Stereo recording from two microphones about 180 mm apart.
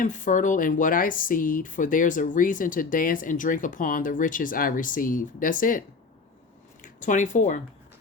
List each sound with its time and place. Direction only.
0.0 s speech: 45° left (ahead or behind)
6.8 s speech: 45° left (ahead or behind)